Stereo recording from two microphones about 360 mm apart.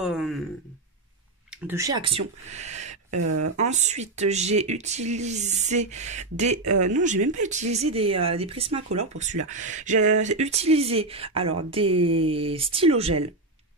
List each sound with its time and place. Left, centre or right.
0.0 s speech: centre
1.7 s speech: centre
3.1 s speech: right
3.5 s speech: centre